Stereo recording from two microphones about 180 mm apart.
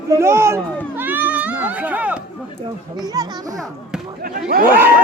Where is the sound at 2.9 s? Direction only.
20° right (ahead or behind).